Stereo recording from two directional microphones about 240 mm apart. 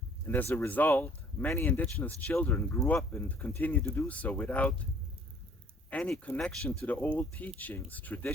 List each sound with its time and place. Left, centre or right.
0.3 s speech: centre
5.9 s speech: centre